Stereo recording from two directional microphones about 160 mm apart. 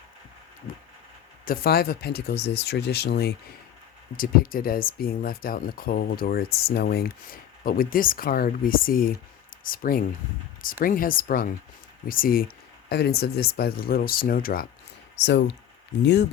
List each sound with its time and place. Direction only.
1.5 s speech: 70° left (ahead or behind); by 3.3 s 90° left
4.2 s speech: 65° left (ahead or behind)
12.9 s speech: 85° left; by 14.7 s 65° left (ahead or behind)
15.2 s speech: 90° left